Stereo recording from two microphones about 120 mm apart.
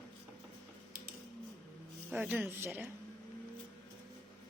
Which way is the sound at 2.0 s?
10° right (ahead or behind).